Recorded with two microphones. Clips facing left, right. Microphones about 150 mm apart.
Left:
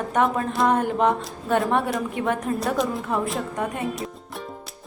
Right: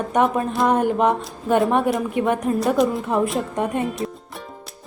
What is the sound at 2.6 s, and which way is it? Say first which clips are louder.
Speech: right 5 dB; centre (ahead or behind).